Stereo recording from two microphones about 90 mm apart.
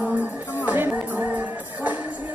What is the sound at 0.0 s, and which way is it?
Music, 15° right (ahead or behind).